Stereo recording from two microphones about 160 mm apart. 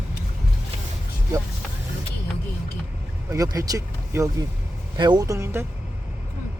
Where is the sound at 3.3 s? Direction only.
20° right (ahead or behind).